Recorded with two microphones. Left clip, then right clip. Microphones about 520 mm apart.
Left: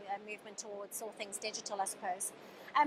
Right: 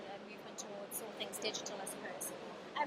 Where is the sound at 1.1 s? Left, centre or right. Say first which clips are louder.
Right 3 dB; left.